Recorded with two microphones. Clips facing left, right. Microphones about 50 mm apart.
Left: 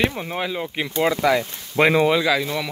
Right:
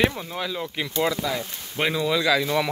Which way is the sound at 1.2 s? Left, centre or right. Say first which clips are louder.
Left 8 dB; left.